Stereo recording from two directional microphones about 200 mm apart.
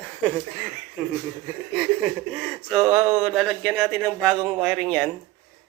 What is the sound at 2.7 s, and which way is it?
Speech, centre (ahead or behind).